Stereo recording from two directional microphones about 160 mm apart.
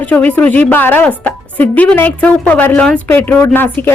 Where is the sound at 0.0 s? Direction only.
10° left (ahead or behind).